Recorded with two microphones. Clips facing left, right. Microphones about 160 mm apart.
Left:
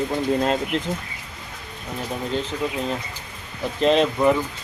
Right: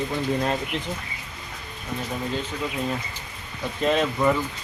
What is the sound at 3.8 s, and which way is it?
Speech, 25° left (ahead or behind).